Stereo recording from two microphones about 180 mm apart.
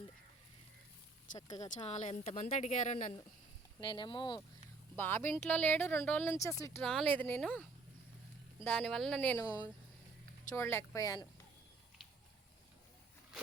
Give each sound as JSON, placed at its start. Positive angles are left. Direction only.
{"t": 1.4, "sound": "speech", "side_deg": 20}
{"t": 1.6, "sound": "speech", "side_deg": 40}
{"t": 3.8, "sound": "speech", "side_deg": 25}
{"t": 4.9, "sound": "speech", "side_deg": 10}
{"t": 6.8, "sound": "speech", "side_deg": 5}